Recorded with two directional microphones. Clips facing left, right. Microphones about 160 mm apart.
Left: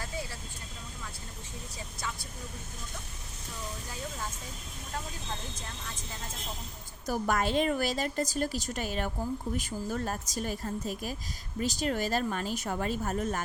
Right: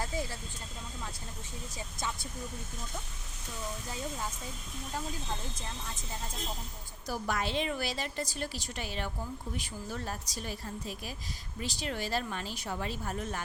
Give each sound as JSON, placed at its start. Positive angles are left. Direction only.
{"t": 7.1, "sound": "a woman's voice", "side_deg": 50}